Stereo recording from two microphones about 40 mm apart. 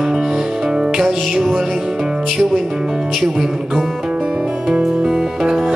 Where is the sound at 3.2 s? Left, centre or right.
Centre.